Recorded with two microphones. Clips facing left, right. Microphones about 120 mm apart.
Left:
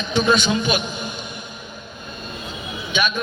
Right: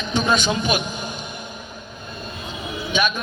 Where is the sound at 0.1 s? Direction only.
45° right (ahead or behind).